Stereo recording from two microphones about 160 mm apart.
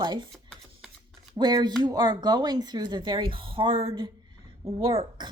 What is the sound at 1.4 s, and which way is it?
A woman's voice, 25° right (ahead or behind).